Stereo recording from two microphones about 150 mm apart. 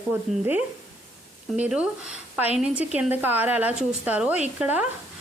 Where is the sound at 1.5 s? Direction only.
5° right (ahead or behind).